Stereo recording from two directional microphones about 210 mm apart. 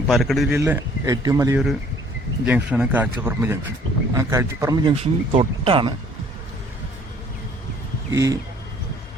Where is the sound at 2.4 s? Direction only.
5° right (ahead or behind); by 5.9 s 25° right (ahead or behind).